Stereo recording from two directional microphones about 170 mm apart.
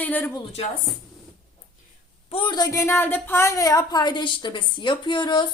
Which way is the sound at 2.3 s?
30° left (ahead or behind).